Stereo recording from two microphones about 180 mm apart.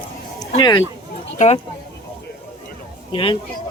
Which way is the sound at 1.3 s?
40° left (ahead or behind).